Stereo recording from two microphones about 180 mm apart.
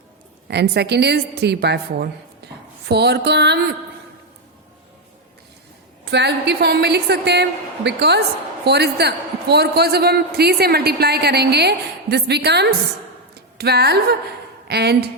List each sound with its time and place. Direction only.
0.4 s a woman's voice: 70° right (ahead or behind)
6.1 s a woman's voice: 65° right (ahead or behind)